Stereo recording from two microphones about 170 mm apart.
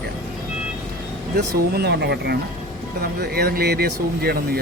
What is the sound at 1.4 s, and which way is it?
Speech, 70° right (ahead or behind).